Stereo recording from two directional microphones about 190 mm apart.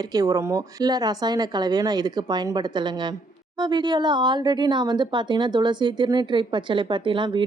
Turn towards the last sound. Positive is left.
turn(degrees=-25)  # may be behind; listen again after turning